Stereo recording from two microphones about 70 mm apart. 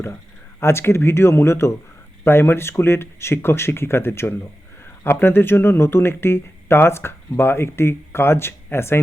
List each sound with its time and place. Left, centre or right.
0.6 s speech: left